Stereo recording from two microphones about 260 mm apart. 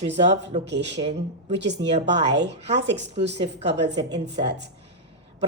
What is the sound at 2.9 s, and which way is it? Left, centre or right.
Speech, right.